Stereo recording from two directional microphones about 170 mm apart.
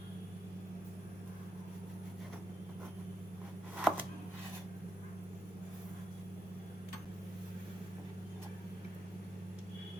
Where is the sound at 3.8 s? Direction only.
5° right (ahead or behind).